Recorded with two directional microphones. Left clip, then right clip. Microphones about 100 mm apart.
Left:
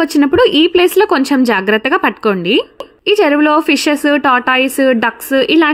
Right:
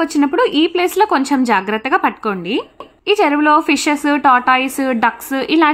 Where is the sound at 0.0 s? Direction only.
40° left (ahead or behind).